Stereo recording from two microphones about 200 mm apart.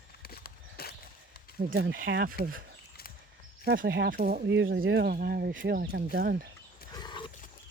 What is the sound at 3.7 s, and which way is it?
Speech, 55° right (ahead or behind).